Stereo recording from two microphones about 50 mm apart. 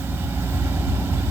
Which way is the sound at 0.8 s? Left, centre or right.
Right.